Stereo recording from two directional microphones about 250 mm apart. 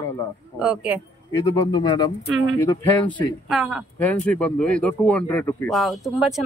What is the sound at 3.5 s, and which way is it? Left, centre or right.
Speech, centre.